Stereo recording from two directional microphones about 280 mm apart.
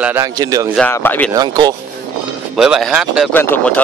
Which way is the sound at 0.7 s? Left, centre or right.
Centre.